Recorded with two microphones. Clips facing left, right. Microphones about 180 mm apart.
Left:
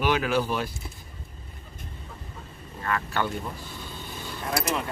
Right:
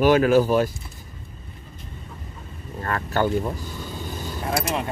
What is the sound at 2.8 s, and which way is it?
Speech, 40° right (ahead or behind).